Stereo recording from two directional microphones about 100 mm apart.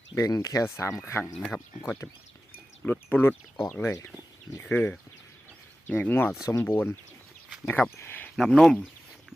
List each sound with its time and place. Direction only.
0.1 s speech: 35° left (ahead or behind)
1.2 s speech: centre (ahead or behind)
1.8 s speech: 30° left (ahead or behind)
2.8 s speech: 15° left (ahead or behind)
3.8 s speech: 30° left (ahead or behind)
4.6 s speech: 20° left (ahead or behind)
7.9 s a sound: 20° left (ahead or behind)
8.4 s speech: 5° left (ahead or behind)